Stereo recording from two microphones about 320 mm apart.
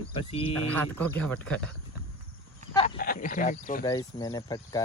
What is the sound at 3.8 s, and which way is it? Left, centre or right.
Speech, centre.